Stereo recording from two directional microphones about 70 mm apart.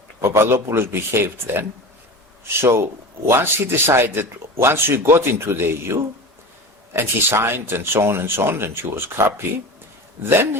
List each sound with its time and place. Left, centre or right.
0.2 s speech: right
10.2 s speech: right